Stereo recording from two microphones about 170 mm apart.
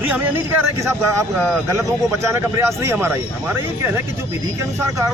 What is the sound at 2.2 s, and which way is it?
Speech, 15° right (ahead or behind).